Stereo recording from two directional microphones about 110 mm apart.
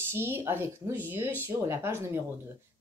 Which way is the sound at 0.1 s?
20° right (ahead or behind).